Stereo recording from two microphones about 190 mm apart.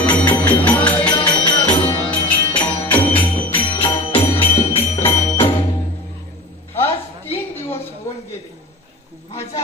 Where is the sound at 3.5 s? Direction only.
25° left (ahead or behind).